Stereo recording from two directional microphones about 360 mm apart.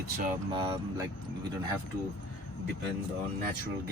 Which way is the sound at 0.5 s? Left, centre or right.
Centre.